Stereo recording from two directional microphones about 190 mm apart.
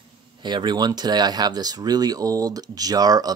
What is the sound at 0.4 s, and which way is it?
Speech, 25° right (ahead or behind).